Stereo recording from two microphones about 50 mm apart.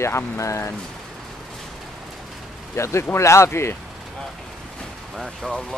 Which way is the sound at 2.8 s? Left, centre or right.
Left.